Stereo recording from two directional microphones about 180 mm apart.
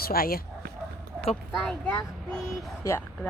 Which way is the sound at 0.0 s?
55° left (ahead or behind).